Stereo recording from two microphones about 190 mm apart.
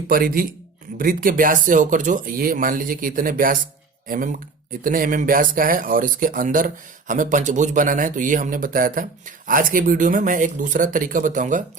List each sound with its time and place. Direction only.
0.1 s speech: 50° right (ahead or behind)